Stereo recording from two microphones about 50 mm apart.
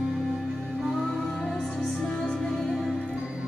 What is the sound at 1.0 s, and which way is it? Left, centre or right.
Music, centre.